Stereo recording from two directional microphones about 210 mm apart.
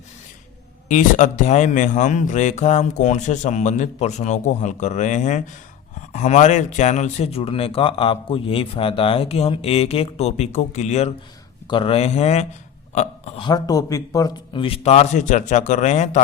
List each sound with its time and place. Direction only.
0.9 s speech: 35° left (ahead or behind)
13.5 s speech: 15° left (ahead or behind); by 16.2 s 35° left (ahead or behind)